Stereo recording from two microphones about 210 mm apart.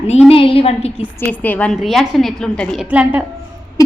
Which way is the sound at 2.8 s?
10° right (ahead or behind).